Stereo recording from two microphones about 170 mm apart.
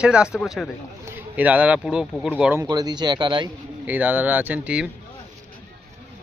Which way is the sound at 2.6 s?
25° right (ahead or behind).